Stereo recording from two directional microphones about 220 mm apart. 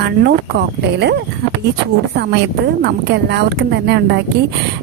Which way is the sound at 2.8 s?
50° right (ahead or behind).